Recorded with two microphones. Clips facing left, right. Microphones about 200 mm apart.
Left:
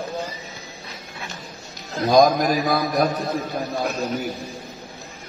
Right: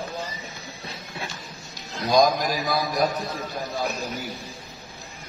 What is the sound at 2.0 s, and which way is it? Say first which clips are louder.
A man's voice: left 4 dB; 50° left (ahead or behind).